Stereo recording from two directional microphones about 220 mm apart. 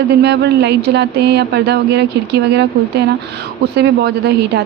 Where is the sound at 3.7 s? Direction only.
50° right (ahead or behind).